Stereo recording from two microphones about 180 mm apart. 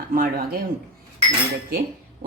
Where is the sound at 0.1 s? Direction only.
55° right (ahead or behind).